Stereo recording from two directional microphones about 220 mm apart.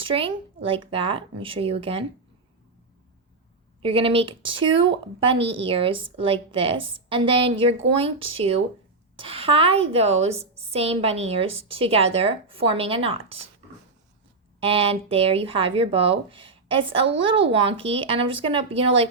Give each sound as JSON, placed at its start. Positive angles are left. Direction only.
{"t": 0.0, "sound": "speech", "side_deg": -25}
{"t": 3.8, "sound": "speech", "side_deg": -25}
{"t": 14.6, "sound": "speech", "side_deg": -25}